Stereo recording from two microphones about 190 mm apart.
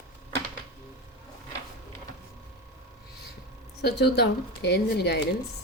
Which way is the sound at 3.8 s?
60° left (ahead or behind).